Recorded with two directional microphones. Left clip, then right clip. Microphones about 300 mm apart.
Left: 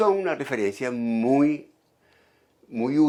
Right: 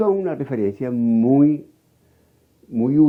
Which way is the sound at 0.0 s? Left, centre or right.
Centre.